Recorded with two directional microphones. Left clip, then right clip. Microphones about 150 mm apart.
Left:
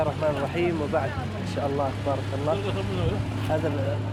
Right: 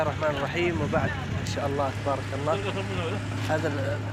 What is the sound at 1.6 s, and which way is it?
Speech, 15° right (ahead or behind).